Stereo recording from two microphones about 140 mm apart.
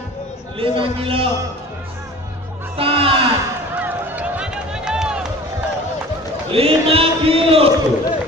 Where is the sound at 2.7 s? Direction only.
40° right (ahead or behind).